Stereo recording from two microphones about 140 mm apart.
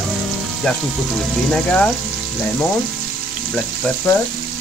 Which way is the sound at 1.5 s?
5° left (ahead or behind).